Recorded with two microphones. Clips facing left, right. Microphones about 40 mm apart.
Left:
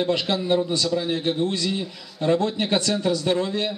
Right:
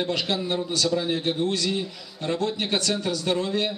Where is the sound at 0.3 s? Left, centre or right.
Centre.